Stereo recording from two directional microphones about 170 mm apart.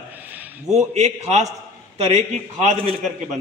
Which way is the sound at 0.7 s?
40° right (ahead or behind).